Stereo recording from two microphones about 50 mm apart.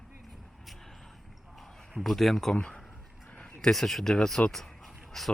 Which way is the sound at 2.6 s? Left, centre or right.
Centre.